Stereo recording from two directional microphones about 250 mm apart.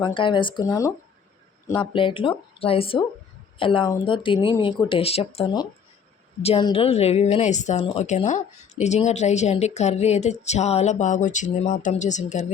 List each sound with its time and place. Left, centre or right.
0.0 s a woman's voice: centre